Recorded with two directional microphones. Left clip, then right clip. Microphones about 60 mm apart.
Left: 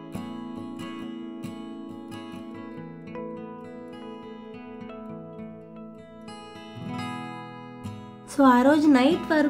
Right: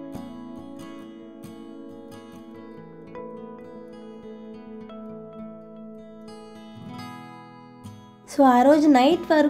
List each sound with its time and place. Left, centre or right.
8.4 s a woman's voice: right